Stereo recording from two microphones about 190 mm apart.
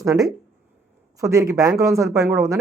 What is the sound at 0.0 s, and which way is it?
Speech, 20° right (ahead or behind).